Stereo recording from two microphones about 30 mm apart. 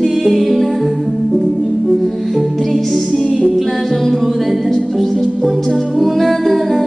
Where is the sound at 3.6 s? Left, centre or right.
Centre.